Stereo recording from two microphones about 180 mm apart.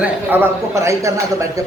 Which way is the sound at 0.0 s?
10° right (ahead or behind).